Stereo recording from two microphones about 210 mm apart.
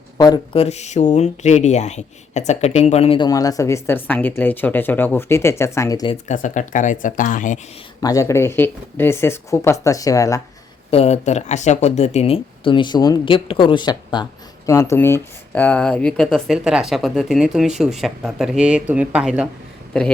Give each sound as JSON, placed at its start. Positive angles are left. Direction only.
{"t": 0.2, "sound": "speech", "side_deg": 25}
{"t": 6.2, "sound": "speech", "side_deg": 35}
{"t": 8.0, "sound": "speech", "side_deg": 15}
{"t": 10.9, "sound": "speech", "side_deg": 30}